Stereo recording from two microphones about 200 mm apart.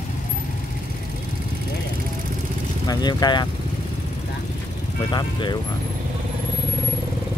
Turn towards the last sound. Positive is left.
turn(degrees=20)  # may be behind; listen again after turning